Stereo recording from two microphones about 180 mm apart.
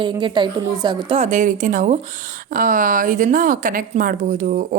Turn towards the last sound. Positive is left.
turn(degrees=-50)  # may be behind; listen again after turning